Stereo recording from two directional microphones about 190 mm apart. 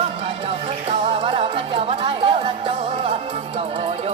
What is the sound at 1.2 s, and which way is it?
Speech, 30° right (ahead or behind).